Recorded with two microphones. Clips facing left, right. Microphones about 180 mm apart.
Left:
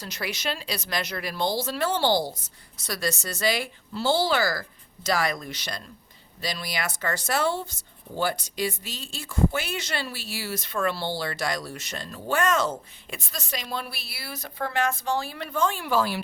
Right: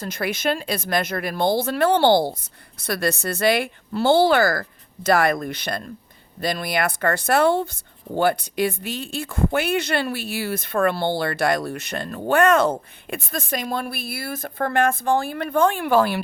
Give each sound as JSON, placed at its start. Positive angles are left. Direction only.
{"t": 0.0, "sound": "speech", "side_deg": -50}